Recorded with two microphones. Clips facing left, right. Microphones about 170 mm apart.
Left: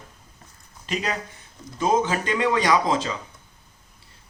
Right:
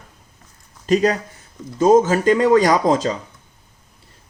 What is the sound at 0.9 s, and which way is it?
Speech, 45° right (ahead or behind).